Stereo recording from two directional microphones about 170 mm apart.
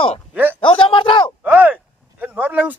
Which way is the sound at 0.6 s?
30° left (ahead or behind).